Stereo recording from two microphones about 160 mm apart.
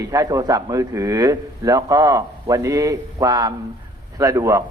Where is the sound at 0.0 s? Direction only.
20° right (ahead or behind).